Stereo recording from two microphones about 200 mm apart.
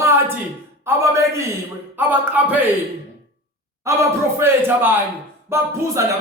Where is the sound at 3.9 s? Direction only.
15° right (ahead or behind).